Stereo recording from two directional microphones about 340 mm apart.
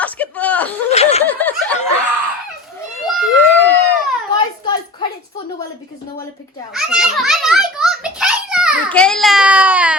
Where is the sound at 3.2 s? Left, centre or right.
Centre.